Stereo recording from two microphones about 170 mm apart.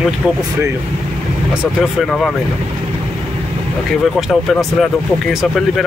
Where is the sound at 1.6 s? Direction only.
Centre (ahead or behind).